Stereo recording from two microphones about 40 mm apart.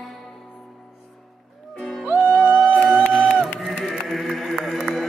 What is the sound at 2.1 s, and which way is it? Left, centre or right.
Music, right.